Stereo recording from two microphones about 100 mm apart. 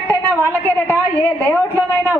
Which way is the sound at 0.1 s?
20° left (ahead or behind).